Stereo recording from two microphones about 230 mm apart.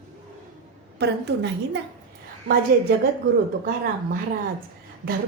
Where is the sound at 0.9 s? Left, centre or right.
Right.